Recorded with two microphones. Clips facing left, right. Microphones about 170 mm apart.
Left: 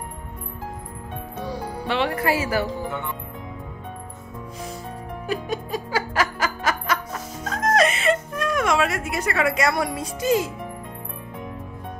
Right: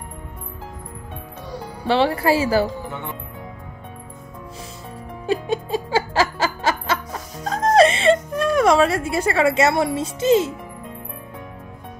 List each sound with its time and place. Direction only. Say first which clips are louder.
1.9 s speech: right 5 dB; 30° right (ahead or behind)
5.2 s music: right 5 dB; 25° right (ahead or behind)
9.9 s a child's voice: right 5 dB; 25° right (ahead or behind)